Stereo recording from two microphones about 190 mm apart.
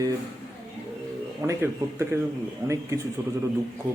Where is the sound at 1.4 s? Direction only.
15° right (ahead or behind).